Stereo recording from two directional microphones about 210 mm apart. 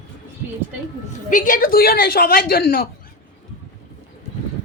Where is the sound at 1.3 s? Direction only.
40° left (ahead or behind).